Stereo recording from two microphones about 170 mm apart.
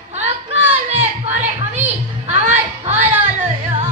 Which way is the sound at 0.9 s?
40° right (ahead or behind).